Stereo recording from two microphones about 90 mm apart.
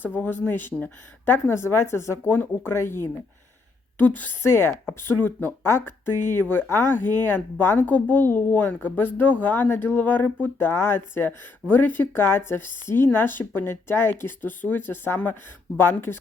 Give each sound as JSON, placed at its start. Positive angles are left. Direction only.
{"t": 0.2, "sound": "speech", "side_deg": 20}